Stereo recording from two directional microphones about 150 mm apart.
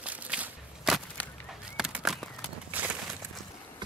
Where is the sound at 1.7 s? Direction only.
5° right (ahead or behind).